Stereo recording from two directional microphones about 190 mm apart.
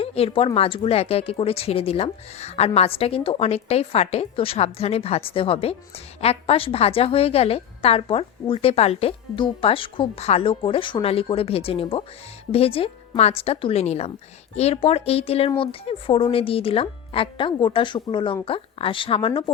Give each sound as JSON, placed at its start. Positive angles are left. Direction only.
{"t": 0.0, "sound": "a woman's voice", "side_deg": 30}